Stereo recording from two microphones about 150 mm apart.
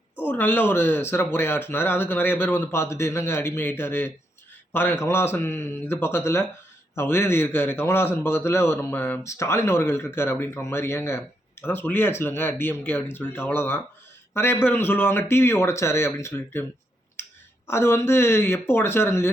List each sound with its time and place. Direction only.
0.3 s speech: 10° left (ahead or behind)
17.2 s clicking: 15° left (ahead or behind)
17.7 s speech: 15° left (ahead or behind)